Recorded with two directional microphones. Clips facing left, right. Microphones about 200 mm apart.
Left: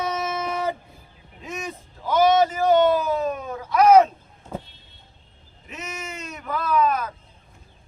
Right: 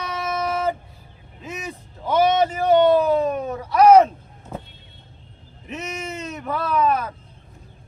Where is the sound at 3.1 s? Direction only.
30° right (ahead or behind).